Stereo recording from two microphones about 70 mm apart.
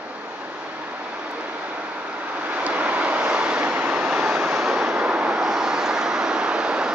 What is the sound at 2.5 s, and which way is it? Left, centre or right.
Vehicle, right.